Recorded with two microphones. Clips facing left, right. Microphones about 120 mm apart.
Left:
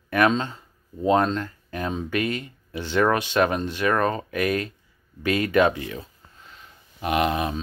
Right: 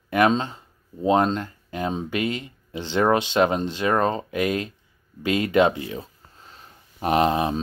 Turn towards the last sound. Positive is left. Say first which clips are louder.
# right 3 dB
turn(degrees=-30)  # may be behind; listen again after turning